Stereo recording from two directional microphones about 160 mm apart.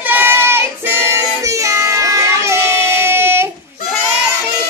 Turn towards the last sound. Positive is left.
turn(degrees=-15)  # may be behind; listen again after turning